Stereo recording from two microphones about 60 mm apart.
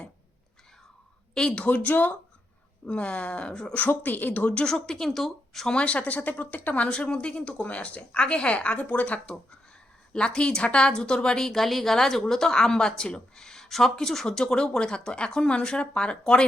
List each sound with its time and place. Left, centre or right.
1.3 s a woman's voice: centre
1.7 s speech: left
3.8 s a woman's voice: left; by 5.7 s centre
5.7 s a woman's voice: left